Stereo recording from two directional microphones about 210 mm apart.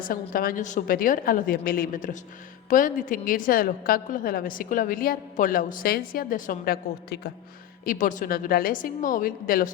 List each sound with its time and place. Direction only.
0.0 s a woman's voice: 40° left (ahead or behind)